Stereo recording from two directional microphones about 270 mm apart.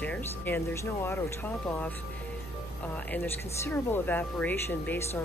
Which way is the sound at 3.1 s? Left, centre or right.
Centre.